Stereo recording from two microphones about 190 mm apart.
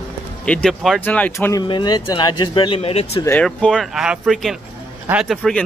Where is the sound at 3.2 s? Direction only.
10° left (ahead or behind).